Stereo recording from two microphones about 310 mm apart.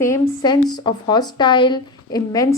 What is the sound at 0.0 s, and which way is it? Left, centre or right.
A woman's voice, centre.